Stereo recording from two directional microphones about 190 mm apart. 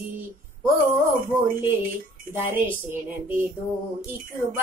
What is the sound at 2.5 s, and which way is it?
Child singing, 10° right (ahead or behind).